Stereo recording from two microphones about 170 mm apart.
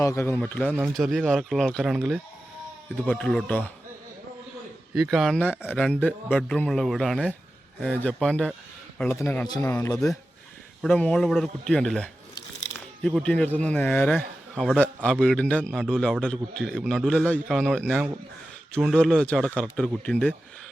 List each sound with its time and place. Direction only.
0.0 s a man's voice: 15° left (ahead or behind)
4.9 s a man's voice: centre (ahead or behind)
9.0 s speech: 15° left (ahead or behind)
10.8 s a man's voice: 5° left (ahead or behind)